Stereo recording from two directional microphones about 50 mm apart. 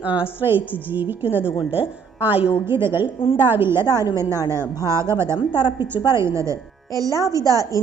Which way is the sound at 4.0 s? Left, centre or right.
Right.